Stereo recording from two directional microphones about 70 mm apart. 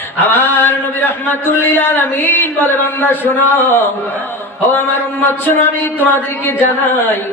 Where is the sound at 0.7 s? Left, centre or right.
Left.